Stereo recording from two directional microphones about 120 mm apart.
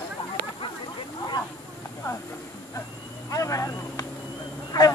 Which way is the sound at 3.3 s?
25° left (ahead or behind).